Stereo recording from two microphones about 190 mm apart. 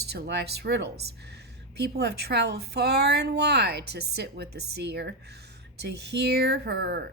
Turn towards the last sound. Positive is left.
turn(degrees=-60)  # may be behind; listen again after turning